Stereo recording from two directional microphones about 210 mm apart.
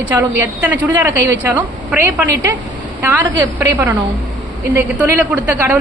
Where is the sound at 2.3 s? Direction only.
55° right (ahead or behind).